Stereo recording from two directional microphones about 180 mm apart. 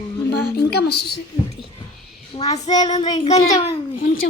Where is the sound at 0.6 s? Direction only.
65° left (ahead or behind).